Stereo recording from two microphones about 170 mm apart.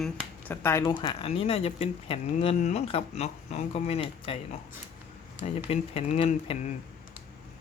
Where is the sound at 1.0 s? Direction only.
35° left (ahead or behind).